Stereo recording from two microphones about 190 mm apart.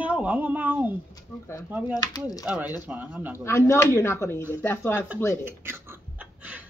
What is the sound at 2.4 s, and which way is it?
Speech, 10° right (ahead or behind).